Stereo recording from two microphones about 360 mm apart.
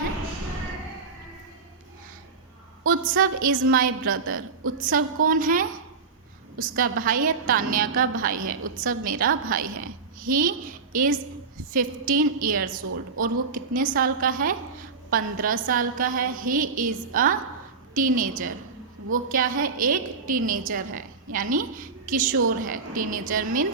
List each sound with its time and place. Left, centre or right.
2.8 s a woman's voice: right